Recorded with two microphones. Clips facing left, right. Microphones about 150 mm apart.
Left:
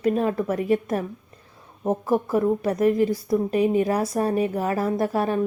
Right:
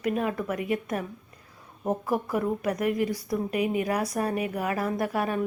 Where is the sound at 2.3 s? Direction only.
30° left (ahead or behind).